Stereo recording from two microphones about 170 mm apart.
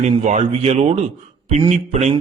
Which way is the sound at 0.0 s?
45° right (ahead or behind).